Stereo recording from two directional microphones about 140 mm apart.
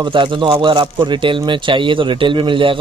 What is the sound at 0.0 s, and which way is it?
Speech, 35° right (ahead or behind).